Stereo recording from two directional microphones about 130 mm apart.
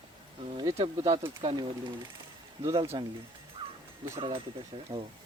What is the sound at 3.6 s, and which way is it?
Dog, 35° right (ahead or behind).